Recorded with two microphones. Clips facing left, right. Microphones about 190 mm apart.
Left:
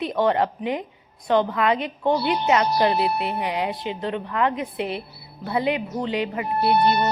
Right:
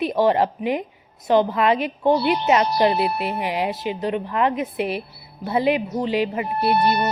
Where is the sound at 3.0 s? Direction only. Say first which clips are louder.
Even; 20° left (ahead or behind).